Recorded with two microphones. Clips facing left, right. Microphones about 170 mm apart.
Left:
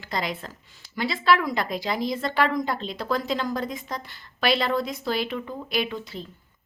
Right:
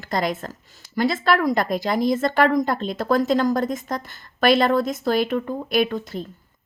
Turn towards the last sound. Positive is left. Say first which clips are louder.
# right 7 dB
turn(degrees=-50)  # may be behind; listen again after turning